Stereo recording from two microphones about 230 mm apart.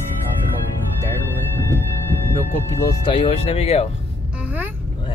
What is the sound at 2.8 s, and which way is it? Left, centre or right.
Speech, centre.